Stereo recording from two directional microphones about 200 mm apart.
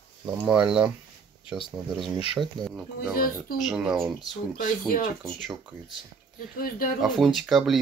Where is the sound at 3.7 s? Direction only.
Centre (ahead or behind).